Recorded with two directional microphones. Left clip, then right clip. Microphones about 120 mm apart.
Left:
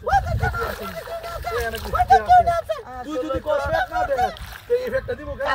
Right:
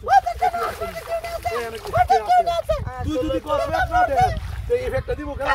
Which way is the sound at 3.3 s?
20° right (ahead or behind).